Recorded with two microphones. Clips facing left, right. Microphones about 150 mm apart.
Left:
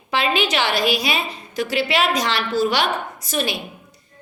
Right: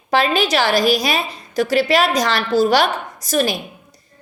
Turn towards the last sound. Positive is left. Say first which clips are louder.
# right 5 dB
turn(degrees=-40)  # may be behind; listen again after turning